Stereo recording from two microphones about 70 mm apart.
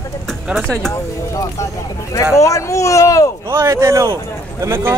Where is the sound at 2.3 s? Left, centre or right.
Left.